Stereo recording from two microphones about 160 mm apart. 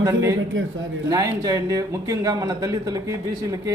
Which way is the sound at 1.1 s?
20° right (ahead or behind).